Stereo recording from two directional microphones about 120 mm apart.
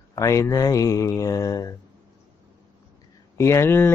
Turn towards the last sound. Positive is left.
turn(degrees=20)  # may be behind; listen again after turning